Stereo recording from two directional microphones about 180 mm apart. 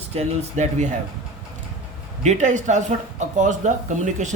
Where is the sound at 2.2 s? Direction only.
40° right (ahead or behind).